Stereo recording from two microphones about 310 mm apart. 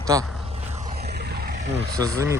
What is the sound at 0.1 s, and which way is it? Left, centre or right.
Speech, centre.